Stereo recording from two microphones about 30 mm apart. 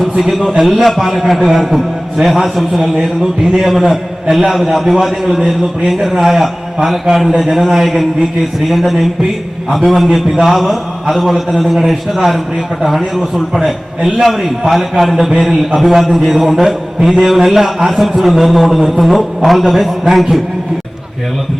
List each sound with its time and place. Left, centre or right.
0.0 s a man's voice: centre
3.8 s a man's voice: centre
13.7 s a man's voice: centre